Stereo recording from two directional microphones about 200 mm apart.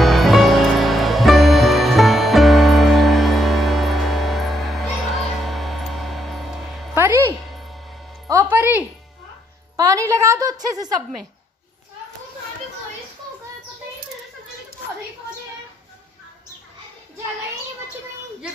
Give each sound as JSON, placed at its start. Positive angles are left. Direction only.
{"t": 0.0, "sound": "music", "side_deg": 0}
{"t": 7.0, "sound": "music", "side_deg": -10}
{"t": 9.8, "sound": "a woman's voice", "side_deg": -15}